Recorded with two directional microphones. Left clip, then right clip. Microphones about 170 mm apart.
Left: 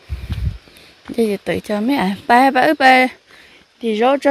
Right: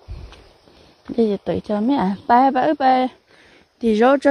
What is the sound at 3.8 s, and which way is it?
Speech, 40° right (ahead or behind).